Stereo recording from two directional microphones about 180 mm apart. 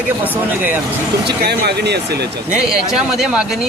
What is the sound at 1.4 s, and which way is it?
Speech, 65° right (ahead or behind).